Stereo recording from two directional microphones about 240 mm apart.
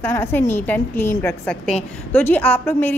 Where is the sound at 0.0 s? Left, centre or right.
Centre.